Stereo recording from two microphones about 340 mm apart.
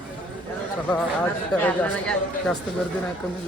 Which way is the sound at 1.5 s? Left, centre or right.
Centre.